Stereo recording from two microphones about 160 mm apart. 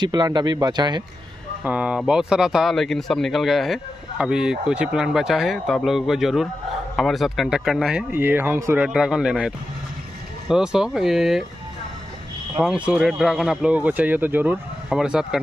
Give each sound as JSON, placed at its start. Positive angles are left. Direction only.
{"t": 0.0, "sound": "speech", "side_deg": -25}
{"t": 1.6, "sound": "speech", "side_deg": -5}
{"t": 8.1, "sound": "speech", "side_deg": -10}
{"t": 8.8, "sound": "speech", "side_deg": -5}
{"t": 10.5, "sound": "speech", "side_deg": -5}
{"t": 12.5, "sound": "speech", "side_deg": -5}